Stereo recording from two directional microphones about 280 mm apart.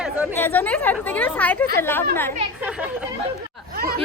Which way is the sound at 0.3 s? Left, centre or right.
Centre.